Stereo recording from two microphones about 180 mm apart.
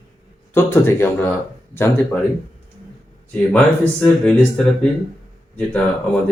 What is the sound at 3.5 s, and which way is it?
Speech, 5° left (ahead or behind).